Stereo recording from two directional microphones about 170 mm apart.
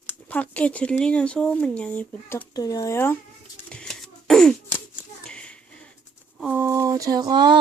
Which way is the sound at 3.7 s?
5° left (ahead or behind).